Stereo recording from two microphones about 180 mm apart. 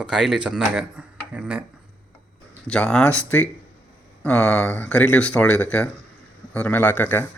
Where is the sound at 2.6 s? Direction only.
5° left (ahead or behind).